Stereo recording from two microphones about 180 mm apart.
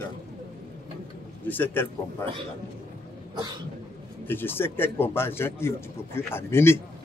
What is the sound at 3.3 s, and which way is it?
Cough, 25° right (ahead or behind).